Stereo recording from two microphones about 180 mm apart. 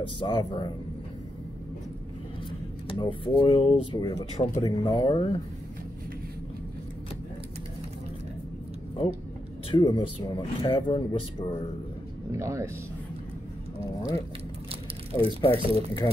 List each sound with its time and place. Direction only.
0.2 s speech: 25° left (ahead or behind)
2.9 s speech: 30° left (ahead or behind)
4.6 s speech: 20° left (ahead or behind)
9.7 s speech: 25° left (ahead or behind)
12.3 s speech: 15° right (ahead or behind)
15.1 s speech: 30° left (ahead or behind)